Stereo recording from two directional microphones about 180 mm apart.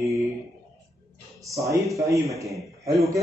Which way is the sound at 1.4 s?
15° right (ahead or behind).